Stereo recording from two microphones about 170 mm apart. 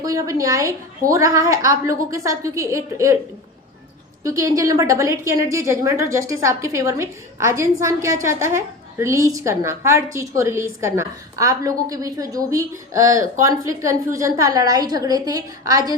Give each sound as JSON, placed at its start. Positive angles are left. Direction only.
{"t": 0.0, "sound": "a woman's voice", "side_deg": -20}
{"t": 4.2, "sound": "a woman's voice", "side_deg": -20}